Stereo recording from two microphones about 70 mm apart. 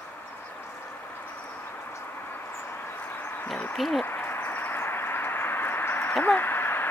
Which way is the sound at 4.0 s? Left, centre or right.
Left.